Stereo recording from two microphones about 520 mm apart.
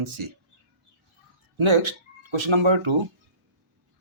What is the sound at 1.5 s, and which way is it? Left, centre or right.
Speech, right.